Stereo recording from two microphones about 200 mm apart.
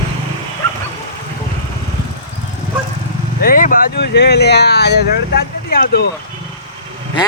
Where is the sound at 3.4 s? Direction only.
45° left (ahead or behind).